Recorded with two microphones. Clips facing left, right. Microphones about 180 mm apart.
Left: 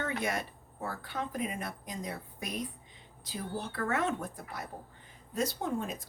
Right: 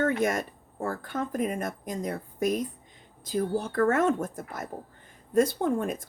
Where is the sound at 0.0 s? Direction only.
45° right (ahead or behind).